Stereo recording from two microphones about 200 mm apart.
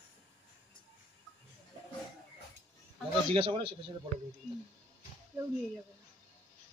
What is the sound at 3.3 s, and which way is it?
Speech, 25° right (ahead or behind).